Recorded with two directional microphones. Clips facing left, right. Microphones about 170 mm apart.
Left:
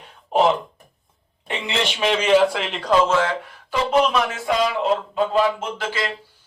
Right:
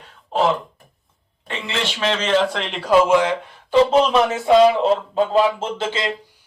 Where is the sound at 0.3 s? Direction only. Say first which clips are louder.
Left 1 dB; 15° left (ahead or behind); by 3.3 s 15° right (ahead or behind).